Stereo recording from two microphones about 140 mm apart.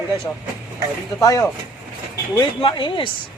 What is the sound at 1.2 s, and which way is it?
Speech, 25° left (ahead or behind).